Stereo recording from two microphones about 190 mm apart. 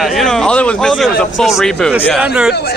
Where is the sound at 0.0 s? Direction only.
Centre (ahead or behind).